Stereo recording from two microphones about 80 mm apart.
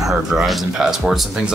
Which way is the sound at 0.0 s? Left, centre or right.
Centre.